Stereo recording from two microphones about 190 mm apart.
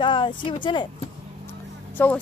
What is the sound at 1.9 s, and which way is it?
Speech, 10° left (ahead or behind).